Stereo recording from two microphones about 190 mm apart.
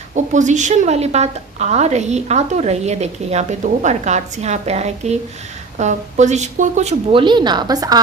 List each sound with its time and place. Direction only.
0.1 s a woman's voice: 40° right (ahead or behind); by 8.0 s 20° right (ahead or behind)